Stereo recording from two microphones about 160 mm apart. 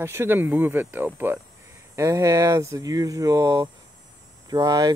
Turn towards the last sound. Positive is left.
turn(degrees=-20)  # may be behind; listen again after turning